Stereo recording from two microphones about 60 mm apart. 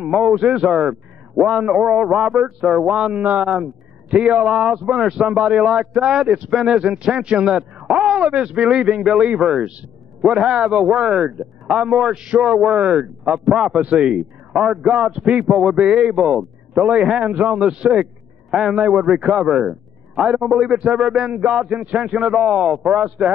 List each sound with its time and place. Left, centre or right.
0.0 s speech: centre
11.8 s speech: centre
12.6 s speech: right
14.0 s a man's voice: centre
15.7 s speech: centre
20.2 s speech: centre
22.4 s speech: centre